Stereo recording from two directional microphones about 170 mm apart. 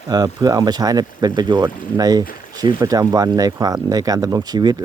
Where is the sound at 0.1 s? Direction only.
25° right (ahead or behind).